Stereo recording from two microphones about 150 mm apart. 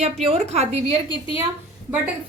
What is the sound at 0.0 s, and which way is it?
A woman's voice, 45° right (ahead or behind).